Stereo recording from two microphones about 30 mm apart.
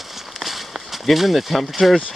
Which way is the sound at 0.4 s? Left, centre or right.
Centre.